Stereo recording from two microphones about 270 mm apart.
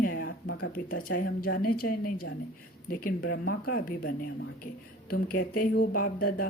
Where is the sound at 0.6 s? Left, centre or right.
Left.